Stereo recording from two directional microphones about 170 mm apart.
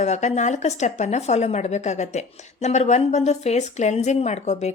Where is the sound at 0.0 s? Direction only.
40° left (ahead or behind).